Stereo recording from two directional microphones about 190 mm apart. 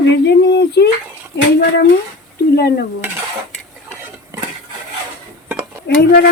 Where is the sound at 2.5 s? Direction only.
55° left (ahead or behind).